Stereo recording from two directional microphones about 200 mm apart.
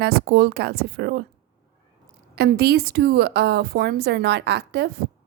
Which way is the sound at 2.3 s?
50° right (ahead or behind).